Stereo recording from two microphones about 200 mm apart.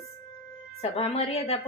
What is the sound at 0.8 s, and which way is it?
Speech, 30° left (ahead or behind).